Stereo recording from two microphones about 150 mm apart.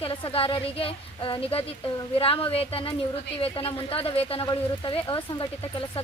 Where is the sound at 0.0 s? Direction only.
35° left (ahead or behind).